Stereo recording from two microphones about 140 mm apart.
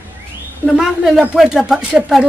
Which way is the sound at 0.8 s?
5° right (ahead or behind).